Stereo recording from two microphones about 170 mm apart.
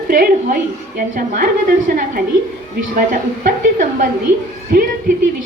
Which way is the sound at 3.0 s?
55° right (ahead or behind).